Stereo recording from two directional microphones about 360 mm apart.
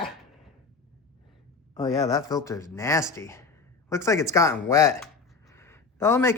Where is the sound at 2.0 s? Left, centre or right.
Centre.